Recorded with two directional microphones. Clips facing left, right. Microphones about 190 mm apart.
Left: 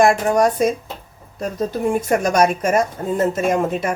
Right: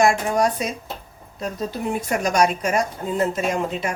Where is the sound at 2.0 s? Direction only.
50° left (ahead or behind).